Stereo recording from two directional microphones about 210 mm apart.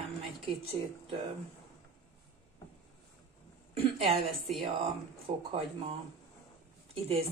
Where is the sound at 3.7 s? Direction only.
25° right (ahead or behind).